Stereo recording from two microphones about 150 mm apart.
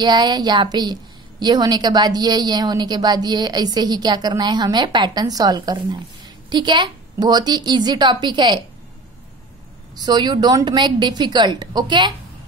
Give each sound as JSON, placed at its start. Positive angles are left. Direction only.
{"t": 0.0, "sound": "a woman's voice", "side_deg": -30}
{"t": 9.9, "sound": "a woman's voice", "side_deg": -30}